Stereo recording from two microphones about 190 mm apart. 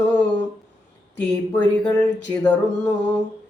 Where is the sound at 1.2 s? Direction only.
10° left (ahead or behind).